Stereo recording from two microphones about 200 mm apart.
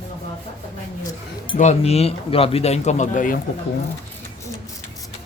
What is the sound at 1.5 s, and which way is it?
Speech, 35° left (ahead or behind).